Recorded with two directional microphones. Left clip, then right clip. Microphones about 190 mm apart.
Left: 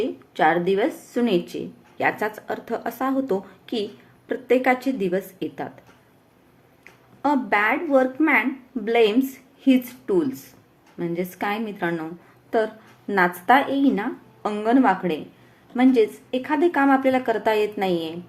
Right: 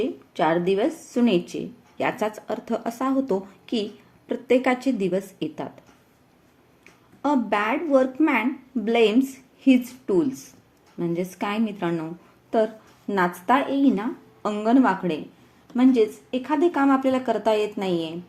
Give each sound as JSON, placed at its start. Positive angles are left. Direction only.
{"t": 0.3, "sound": "a woman's voice", "side_deg": -30}
{"t": 7.2, "sound": "a woman's voice", "side_deg": -30}